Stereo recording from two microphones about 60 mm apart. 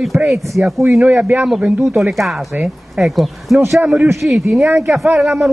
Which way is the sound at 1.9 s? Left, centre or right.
Centre.